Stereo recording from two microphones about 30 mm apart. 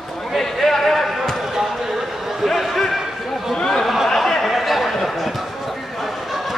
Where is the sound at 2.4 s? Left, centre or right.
Centre.